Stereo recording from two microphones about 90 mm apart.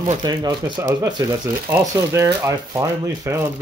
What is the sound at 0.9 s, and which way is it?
Speech, 40° right (ahead or behind).